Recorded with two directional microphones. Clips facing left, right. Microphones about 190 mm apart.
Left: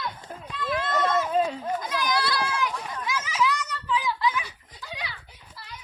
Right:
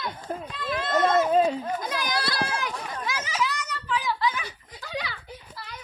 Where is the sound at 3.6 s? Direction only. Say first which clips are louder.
Left 1 dB; 70° right (ahead or behind).